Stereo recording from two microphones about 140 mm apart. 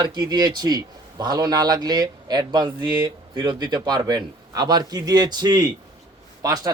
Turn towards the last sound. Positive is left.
turn(degrees=-25)  # may be behind; listen again after turning